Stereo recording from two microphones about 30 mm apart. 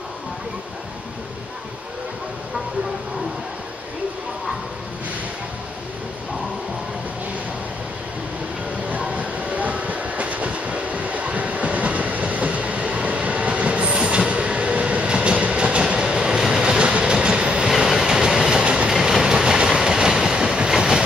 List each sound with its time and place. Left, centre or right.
9.0 s train: right
13.9 s train: right
16.0 s train: right
17.6 s train: centre
18.6 s train: right
18.9 s train: centre
19.2 s train: right